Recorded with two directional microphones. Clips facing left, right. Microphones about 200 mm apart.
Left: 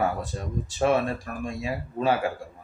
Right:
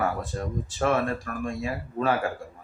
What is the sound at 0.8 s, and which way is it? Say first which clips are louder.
Speech: left 2 dB; 15° left (ahead or behind).